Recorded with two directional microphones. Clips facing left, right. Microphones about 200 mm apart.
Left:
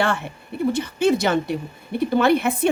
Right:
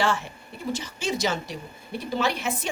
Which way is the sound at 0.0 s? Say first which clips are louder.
Left 3 dB; 60° left (ahead or behind).